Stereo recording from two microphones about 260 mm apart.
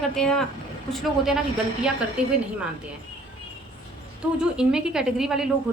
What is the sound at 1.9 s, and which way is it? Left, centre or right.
Speech, centre.